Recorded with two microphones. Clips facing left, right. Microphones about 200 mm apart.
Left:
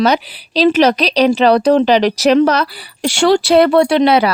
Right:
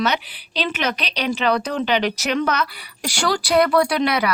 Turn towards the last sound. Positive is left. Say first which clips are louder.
# left 8 dB
turn(degrees=30)  # may be behind; listen again after turning